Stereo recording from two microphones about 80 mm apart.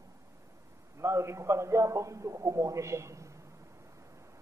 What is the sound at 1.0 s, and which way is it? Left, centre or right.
A man's voice, right.